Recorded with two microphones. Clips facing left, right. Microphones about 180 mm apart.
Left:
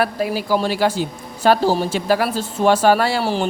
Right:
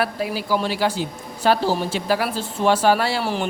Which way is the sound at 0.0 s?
45° left (ahead or behind).